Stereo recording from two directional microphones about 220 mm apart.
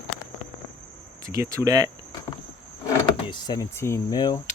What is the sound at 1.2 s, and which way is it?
Speech, 15° right (ahead or behind).